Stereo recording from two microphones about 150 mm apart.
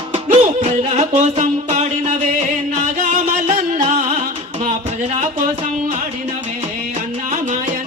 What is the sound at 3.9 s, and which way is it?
Music, 50° right (ahead or behind).